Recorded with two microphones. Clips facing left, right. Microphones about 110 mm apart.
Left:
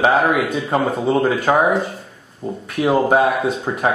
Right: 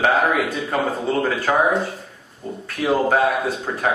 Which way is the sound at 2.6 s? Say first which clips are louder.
Left 3 dB; 20° left (ahead or behind).